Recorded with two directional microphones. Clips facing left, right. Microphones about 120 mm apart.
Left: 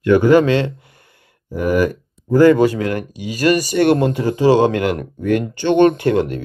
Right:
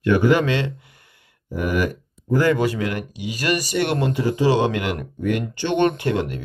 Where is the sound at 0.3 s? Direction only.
35° left (ahead or behind).